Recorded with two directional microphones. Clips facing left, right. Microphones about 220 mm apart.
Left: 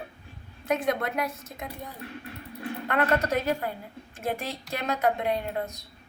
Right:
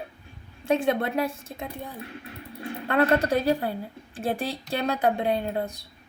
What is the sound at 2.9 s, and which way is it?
Speech, 30° right (ahead or behind).